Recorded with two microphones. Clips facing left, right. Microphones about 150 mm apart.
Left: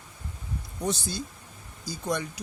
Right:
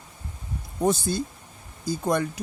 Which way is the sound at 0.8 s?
55° right (ahead or behind).